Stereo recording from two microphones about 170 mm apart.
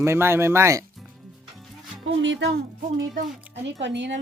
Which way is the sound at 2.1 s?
90° right.